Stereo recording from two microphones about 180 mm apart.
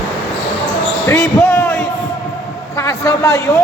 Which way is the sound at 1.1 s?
15° left (ahead or behind).